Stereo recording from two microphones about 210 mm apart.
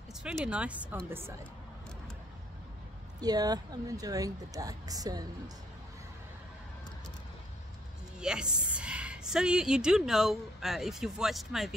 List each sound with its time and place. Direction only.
0.1 s a woman's voice: centre (ahead or behind)
3.2 s speech: 20° right (ahead or behind)
8.2 s a woman's voice: 5° right (ahead or behind)